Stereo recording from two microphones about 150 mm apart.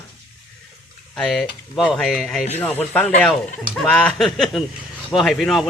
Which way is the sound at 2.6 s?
10° left (ahead or behind).